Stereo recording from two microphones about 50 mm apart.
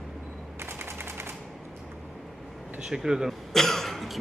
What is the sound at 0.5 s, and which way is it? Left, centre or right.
Machine gun, right.